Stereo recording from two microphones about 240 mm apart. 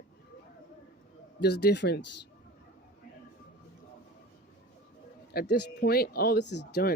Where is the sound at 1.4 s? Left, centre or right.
Left.